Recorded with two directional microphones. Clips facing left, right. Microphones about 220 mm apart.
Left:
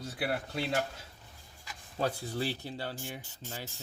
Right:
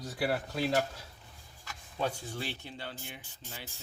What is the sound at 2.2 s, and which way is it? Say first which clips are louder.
Speech: left 5 dB; 35° left (ahead or behind).